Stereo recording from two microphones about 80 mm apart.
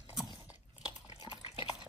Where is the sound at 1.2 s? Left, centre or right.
Left.